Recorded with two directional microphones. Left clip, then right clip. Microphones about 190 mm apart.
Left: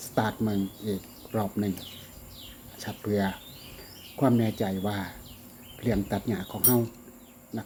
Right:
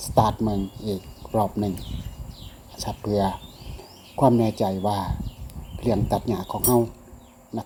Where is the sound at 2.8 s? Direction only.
15° right (ahead or behind).